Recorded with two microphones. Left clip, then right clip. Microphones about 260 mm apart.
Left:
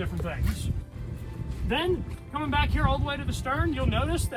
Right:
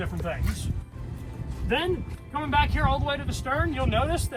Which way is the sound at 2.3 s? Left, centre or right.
Centre.